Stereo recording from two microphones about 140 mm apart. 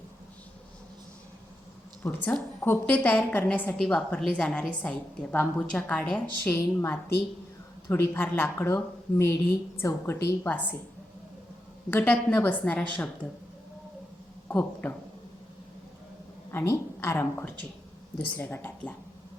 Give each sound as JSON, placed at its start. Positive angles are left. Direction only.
{"t": 2.0, "sound": "a woman's voice", "side_deg": 10}
{"t": 11.9, "sound": "a woman's voice", "side_deg": 15}
{"t": 14.4, "sound": "speech", "side_deg": 15}
{"t": 16.5, "sound": "a woman's voice", "side_deg": 20}